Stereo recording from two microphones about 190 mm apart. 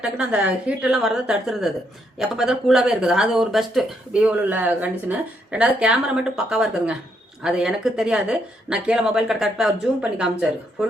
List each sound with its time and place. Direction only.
0.0 s speech: 5° right (ahead or behind)